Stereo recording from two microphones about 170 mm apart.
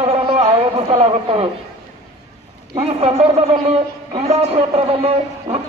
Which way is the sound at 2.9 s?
35° right (ahead or behind).